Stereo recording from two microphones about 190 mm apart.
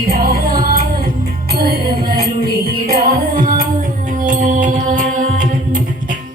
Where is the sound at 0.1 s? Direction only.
50° right (ahead or behind).